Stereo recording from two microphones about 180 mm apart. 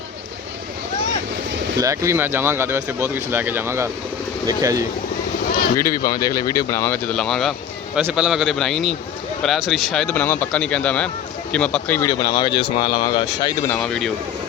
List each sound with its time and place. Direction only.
1.8 s speech: 15° right (ahead or behind)
5.7 s speech: 15° left (ahead or behind)
12.2 s speech: 25° left (ahead or behind)
13.7 s speech: 5° left (ahead or behind)